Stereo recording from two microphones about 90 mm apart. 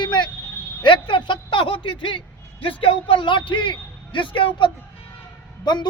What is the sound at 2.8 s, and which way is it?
A man's voice, 75° left (ahead or behind).